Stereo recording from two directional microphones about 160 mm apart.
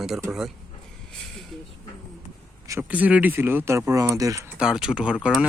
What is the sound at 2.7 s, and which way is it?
Speech, 10° right (ahead or behind).